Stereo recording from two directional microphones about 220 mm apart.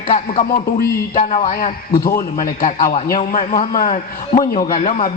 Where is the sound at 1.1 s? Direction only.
35° left (ahead or behind).